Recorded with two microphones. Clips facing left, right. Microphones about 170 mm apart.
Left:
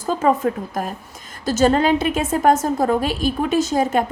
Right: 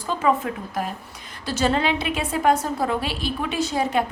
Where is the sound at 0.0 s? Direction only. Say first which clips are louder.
Left 4 dB; 45° left (ahead or behind).